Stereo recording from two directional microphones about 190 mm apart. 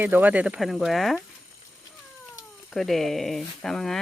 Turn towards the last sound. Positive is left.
turn(degrees=0)  # may be behind; listen again after turning